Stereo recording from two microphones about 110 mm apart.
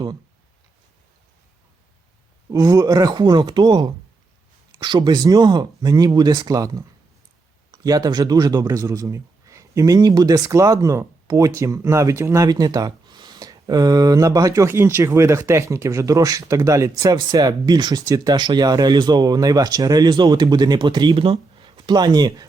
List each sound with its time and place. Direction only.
2.5 s speech: 35° right (ahead or behind)